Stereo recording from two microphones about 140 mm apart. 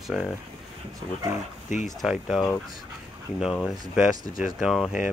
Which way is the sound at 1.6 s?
60° left (ahead or behind).